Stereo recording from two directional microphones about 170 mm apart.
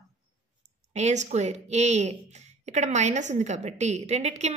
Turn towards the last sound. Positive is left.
turn(degrees=-40)  # may be behind; listen again after turning